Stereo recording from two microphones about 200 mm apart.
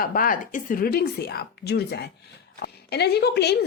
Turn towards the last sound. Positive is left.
turn(degrees=55)  # may be behind; listen again after turning